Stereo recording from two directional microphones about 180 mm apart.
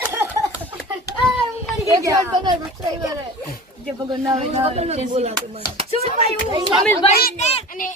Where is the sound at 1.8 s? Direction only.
20° right (ahead or behind).